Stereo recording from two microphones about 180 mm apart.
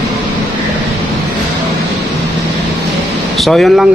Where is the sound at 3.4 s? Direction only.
Centre (ahead or behind).